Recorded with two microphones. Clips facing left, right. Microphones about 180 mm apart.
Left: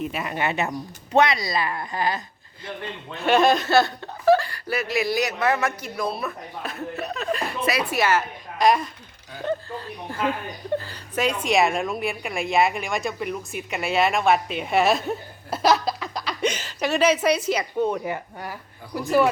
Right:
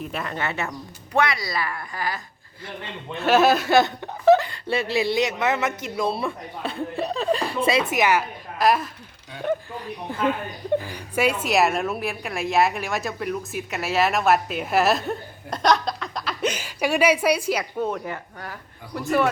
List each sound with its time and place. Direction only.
0.0 s speech: 5° left (ahead or behind); by 2.2 s 20° left (ahead or behind)
3.2 s speech: 5° right (ahead or behind)
8.5 s a woman's voice: 5° right (ahead or behind)
17.9 s a woman's voice: 15° left (ahead or behind)